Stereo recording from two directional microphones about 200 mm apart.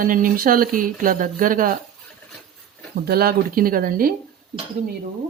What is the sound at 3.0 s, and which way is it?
Speech, 50° right (ahead or behind).